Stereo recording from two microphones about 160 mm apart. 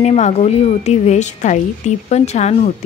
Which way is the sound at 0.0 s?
45° left (ahead or behind).